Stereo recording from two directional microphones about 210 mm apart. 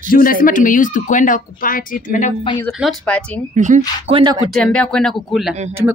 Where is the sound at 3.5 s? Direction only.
35° right (ahead or behind).